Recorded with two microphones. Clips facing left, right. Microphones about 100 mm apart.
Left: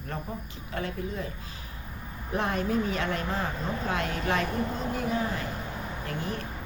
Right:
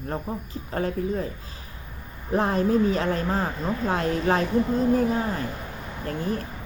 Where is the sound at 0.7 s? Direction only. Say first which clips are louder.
Right 7 dB; 40° right (ahead or behind).